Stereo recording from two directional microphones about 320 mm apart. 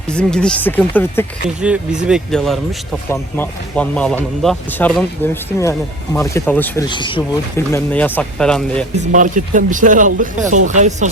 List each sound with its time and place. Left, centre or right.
0.1 s speech: centre
9.0 s speech: right